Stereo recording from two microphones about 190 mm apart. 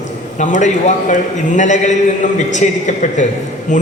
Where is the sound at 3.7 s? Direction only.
40° left (ahead or behind).